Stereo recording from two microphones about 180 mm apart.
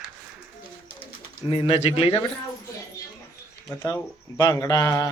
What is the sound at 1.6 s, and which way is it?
Speech, 35° left (ahead or behind).